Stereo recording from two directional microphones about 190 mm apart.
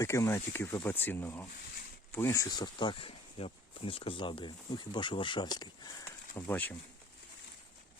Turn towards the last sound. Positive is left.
turn(degrees=10)  # may be behind; listen again after turning